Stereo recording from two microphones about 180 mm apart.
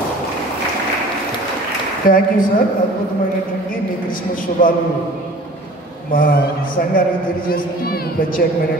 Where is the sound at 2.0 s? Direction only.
50° left (ahead or behind).